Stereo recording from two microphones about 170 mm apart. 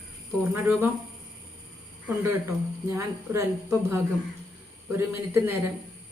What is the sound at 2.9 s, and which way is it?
A woman's voice, 15° right (ahead or behind).